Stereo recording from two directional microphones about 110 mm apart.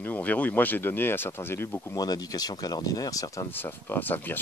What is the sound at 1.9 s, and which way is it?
Speech, 35° left (ahead or behind).